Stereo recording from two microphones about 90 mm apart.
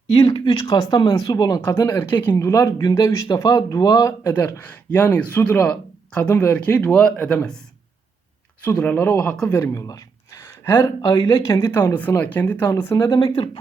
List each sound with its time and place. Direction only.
0.1 s speech: 60° left (ahead or behind); by 1.6 s 40° left (ahead or behind)
1.9 s speech: 20° left (ahead or behind)
2.5 s speech: 35° left (ahead or behind)
4.0 s speech: 35° left (ahead or behind)
4.6 s speech: 20° left (ahead or behind)
8.6 s speech: 15° left (ahead or behind); by 10.4 s 40° left (ahead or behind)
10.4 s a sound: 25° left (ahead or behind)
11.0 s speech: 40° left (ahead or behind)
13.2 s speech: 75° left (ahead or behind)